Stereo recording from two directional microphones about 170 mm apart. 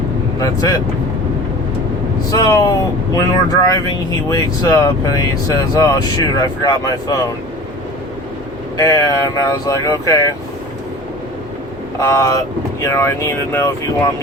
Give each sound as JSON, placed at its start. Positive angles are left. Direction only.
{"t": 0.3, "sound": "speech", "side_deg": 20}
{"t": 2.3, "sound": "speech", "side_deg": 20}
{"t": 8.8, "sound": "speech", "side_deg": 20}
{"t": 11.9, "sound": "speech", "side_deg": 20}